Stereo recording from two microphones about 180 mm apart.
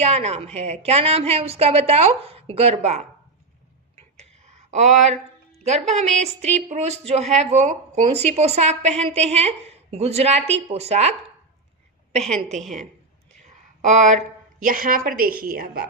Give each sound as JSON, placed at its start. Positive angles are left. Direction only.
{"t": 0.0, "sound": "a woman's voice", "side_deg": -40}
{"t": 4.7, "sound": "a woman's voice", "side_deg": -40}
{"t": 12.3, "sound": "a woman's voice", "side_deg": -40}
{"t": 13.8, "sound": "a woman's voice", "side_deg": -40}